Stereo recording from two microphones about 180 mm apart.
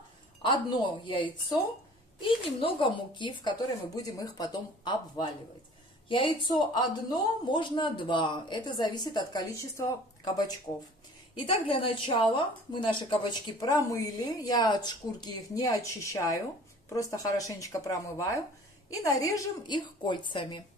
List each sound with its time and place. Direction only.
0.4 s a man's voice: 25° left (ahead or behind)
13.2 s a man's voice: 20° left (ahead or behind)